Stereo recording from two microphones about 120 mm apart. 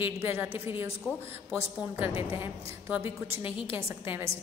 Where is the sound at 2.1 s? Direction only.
50° left (ahead or behind).